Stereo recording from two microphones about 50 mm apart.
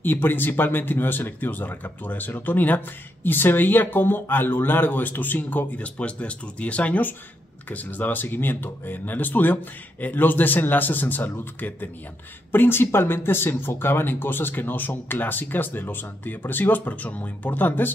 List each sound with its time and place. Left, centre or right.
0.0 s speech: left
12.5 s speech: left